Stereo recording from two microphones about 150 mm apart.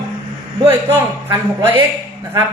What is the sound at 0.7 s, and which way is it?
A man's voice, 15° right (ahead or behind).